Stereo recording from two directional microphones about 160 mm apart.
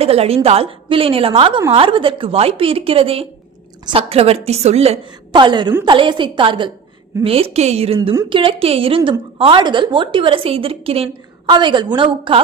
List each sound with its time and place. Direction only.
0.0 s a woman's voice: 40° right (ahead or behind)